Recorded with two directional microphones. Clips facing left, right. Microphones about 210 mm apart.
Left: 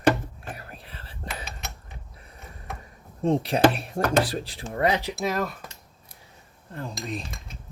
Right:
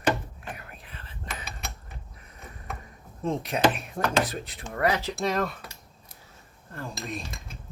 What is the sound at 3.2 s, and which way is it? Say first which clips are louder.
Speech: left 4 dB; 35° left (ahead or behind).